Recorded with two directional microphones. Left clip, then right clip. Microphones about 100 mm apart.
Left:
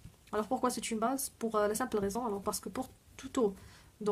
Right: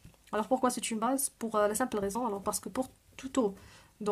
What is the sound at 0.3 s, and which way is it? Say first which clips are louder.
Speech: right 3 dB; 45° right (ahead or behind).